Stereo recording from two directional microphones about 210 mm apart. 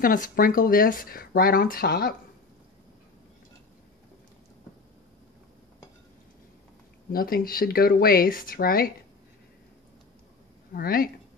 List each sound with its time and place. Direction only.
0.0 s speech: 40° left (ahead or behind)
7.1 s speech: 45° left (ahead or behind)
10.7 s speech: 45° left (ahead or behind)